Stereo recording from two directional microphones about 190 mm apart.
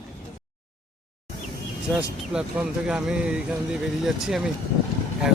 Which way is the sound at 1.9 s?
5° right (ahead or behind).